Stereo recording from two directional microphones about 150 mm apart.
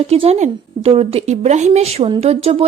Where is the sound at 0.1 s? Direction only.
45° right (ahead or behind).